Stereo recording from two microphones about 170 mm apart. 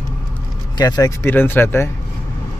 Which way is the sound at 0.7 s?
25° left (ahead or behind).